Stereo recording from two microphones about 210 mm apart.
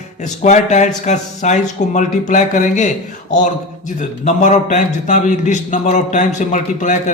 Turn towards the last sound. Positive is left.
turn(degrees=35)  # may be behind; listen again after turning